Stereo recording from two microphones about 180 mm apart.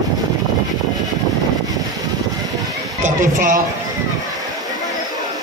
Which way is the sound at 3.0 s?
45° right (ahead or behind).